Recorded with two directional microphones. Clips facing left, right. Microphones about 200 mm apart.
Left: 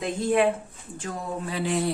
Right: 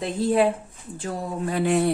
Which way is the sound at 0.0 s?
35° right (ahead or behind).